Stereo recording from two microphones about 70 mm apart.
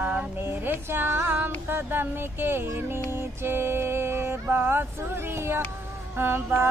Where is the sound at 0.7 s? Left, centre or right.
Right.